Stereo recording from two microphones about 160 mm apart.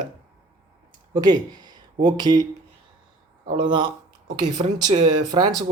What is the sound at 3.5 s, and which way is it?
Speech, 30° right (ahead or behind).